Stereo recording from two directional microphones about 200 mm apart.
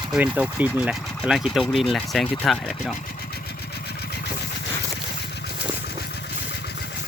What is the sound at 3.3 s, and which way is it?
Engine, 55° left (ahead or behind).